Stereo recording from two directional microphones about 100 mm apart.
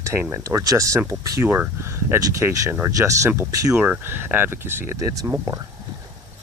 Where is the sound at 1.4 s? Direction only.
20° right (ahead or behind).